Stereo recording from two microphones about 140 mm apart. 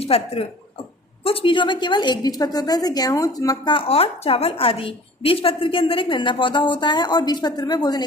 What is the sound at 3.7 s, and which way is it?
A woman's voice, 40° left (ahead or behind).